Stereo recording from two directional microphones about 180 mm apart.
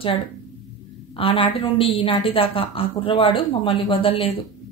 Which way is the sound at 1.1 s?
30° left (ahead or behind).